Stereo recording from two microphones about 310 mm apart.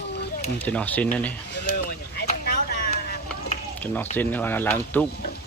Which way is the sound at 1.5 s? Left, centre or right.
Left.